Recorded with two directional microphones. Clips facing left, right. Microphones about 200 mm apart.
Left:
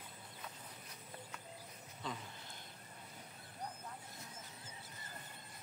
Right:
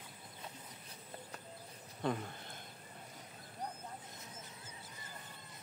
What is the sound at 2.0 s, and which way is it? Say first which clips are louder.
Speech: right 9 dB; 60° right (ahead or behind).